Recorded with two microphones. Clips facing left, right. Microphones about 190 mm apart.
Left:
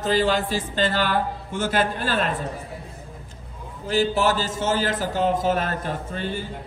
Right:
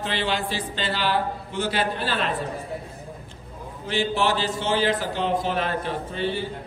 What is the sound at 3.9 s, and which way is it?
A man's voice, 40° left (ahead or behind).